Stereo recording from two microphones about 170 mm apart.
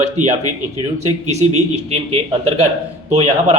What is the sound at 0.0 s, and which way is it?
A man's voice, 45° right (ahead or behind).